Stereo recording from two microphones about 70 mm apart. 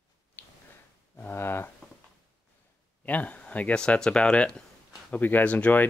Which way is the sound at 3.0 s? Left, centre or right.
Left.